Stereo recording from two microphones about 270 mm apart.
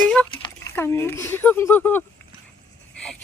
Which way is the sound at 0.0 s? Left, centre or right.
Centre.